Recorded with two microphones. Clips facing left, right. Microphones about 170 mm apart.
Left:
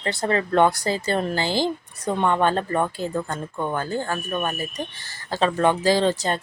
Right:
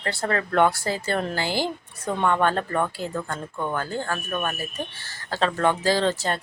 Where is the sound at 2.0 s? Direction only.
15° left (ahead or behind).